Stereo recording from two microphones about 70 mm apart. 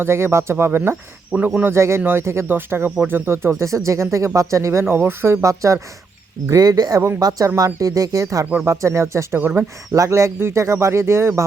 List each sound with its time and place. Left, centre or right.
0.0 s speech: right
1.3 s a man's voice: right
1.6 s speech: right
3.6 s speech: right
5.4 s speech: right
6.5 s speech: right
8.6 s speech: right